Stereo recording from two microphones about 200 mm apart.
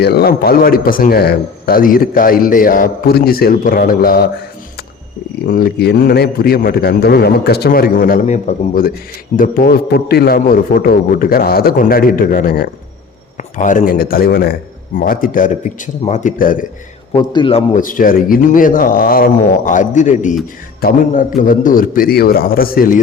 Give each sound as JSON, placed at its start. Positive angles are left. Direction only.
{"t": 0.0, "sound": "a man's voice", "side_deg": 50}
{"t": 5.5, "sound": "a man's voice", "side_deg": 50}
{"t": 13.3, "sound": "a man's voice", "side_deg": 40}
{"t": 17.2, "sound": "a man's voice", "side_deg": 25}
{"t": 17.7, "sound": "a man's voice", "side_deg": 40}